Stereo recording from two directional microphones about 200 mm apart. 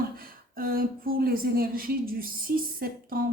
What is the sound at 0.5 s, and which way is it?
A woman's voice, 45° right (ahead or behind).